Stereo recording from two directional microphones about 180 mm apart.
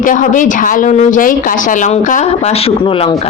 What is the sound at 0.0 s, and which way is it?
Speech, 45° left (ahead or behind).